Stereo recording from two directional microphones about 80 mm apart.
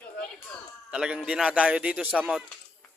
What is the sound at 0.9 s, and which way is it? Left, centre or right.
Speech, centre.